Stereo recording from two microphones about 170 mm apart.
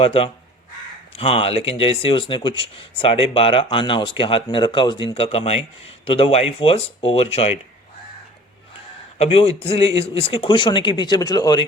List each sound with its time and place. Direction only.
0.0 s speech: 35° left (ahead or behind)
9.1 s speech: 35° left (ahead or behind)